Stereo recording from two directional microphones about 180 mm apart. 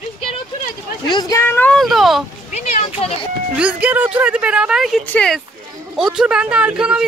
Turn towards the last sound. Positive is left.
turn(degrees=-5)  # may be behind; listen again after turning